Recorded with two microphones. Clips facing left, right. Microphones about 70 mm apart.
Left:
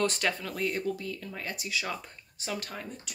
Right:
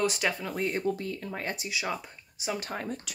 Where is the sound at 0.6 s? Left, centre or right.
Right; by 2.5 s centre.